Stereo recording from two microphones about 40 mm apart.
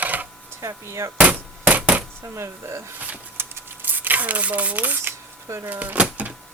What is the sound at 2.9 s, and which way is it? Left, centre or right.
Speech, right.